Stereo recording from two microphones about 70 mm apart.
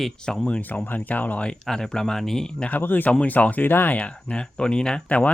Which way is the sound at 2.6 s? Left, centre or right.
Left.